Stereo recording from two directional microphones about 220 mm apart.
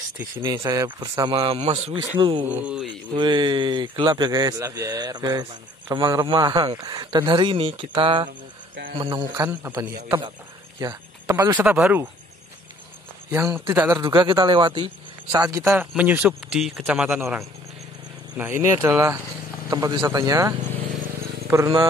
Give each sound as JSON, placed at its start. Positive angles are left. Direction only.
{"t": 0.4, "sound": "speech", "side_deg": -15}
{"t": 2.4, "sound": "speech", "side_deg": -5}
{"t": 3.2, "sound": "speech", "side_deg": -20}
{"t": 8.3, "sound": "cricket", "side_deg": -50}
{"t": 8.9, "sound": "speech", "side_deg": -20}
{"t": 13.3, "sound": "speech", "side_deg": -15}